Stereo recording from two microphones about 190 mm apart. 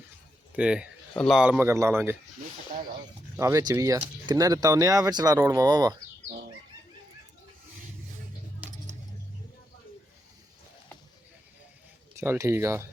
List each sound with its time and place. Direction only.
0.5 s speech: 5° right (ahead or behind)
3.3 s speech: 15° right (ahead or behind)
12.2 s speech: 15° right (ahead or behind)